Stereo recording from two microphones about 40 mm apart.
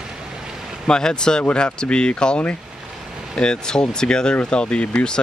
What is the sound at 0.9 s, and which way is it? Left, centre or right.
Speech, centre.